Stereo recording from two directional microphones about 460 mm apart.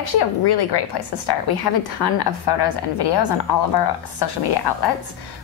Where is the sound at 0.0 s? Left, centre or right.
Left.